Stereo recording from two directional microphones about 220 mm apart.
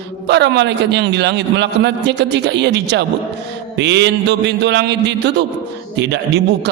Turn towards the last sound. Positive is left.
turn(degrees=-50)  # may be behind; listen again after turning